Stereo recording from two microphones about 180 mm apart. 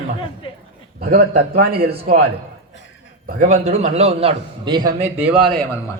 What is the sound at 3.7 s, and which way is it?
A man's voice, 35° right (ahead or behind).